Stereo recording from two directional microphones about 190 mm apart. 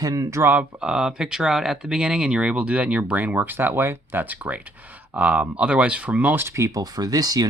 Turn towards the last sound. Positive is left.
turn(degrees=-20)  # may be behind; listen again after turning